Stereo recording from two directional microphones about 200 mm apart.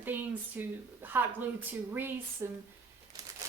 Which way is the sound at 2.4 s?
15° right (ahead or behind).